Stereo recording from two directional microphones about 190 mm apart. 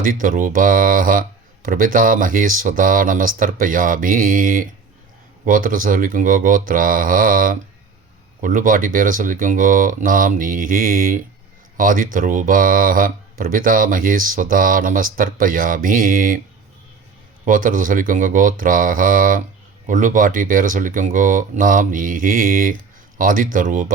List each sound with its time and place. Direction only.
0.0 s speech: 45° right (ahead or behind)
17.4 s speech: 45° right (ahead or behind)